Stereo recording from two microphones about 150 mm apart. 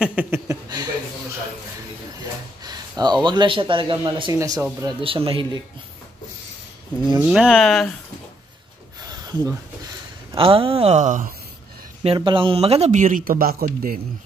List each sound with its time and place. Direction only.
0.0 s speech: 10° right (ahead or behind)
0.5 s a sound: 25° right (ahead or behind)
2.6 s speech: 30° right (ahead or behind)
4.3 s speech: 20° right (ahead or behind)
5.0 s speech: 35° right (ahead or behind)
7.2 s speech: 5° right (ahead or behind)
9.1 s a sound: 25° right (ahead or behind)
10.3 s speech: 35° right (ahead or behind); by 11.2 s 50° right (ahead or behind)
12.0 s speech: 35° right (ahead or behind); by 13.9 s 75° right (ahead or behind)